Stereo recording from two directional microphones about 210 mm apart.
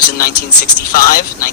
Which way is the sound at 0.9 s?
45° left (ahead or behind).